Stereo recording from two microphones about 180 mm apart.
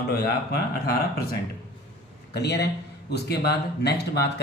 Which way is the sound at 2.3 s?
65° left (ahead or behind).